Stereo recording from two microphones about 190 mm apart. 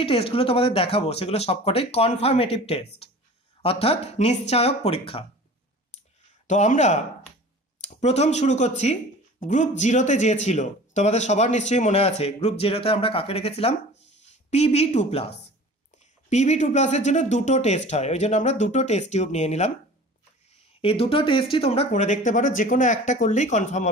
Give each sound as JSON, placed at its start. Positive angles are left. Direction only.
{"t": 0.0, "sound": "speech", "side_deg": 30}
{"t": 6.4, "sound": "speech", "side_deg": 40}
{"t": 20.8, "sound": "speech", "side_deg": 30}